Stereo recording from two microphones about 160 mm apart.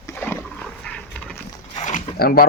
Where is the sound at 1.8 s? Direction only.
50° left (ahead or behind).